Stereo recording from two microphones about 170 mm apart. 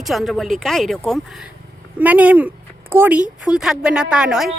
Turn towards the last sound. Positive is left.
turn(degrees=-5)  # may be behind; listen again after turning